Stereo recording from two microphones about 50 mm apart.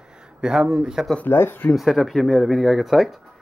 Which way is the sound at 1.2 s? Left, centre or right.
Left.